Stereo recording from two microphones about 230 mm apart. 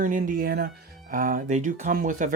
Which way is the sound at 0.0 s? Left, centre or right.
Right.